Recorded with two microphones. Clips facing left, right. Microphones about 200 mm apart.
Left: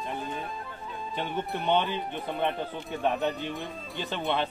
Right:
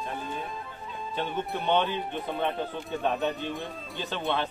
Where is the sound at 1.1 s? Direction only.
15° left (ahead or behind).